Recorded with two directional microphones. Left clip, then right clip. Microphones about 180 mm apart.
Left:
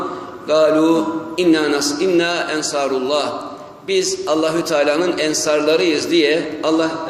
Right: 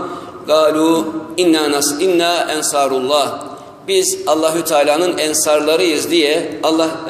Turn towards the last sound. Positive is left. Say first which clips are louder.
# right 2 dB
turn(degrees=15)  # may be behind; listen again after turning